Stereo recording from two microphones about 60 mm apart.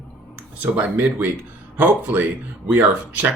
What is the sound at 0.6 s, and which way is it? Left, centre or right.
Speech, right.